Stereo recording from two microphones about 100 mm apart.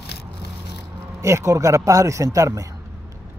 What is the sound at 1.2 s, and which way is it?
Speech, 30° right (ahead or behind).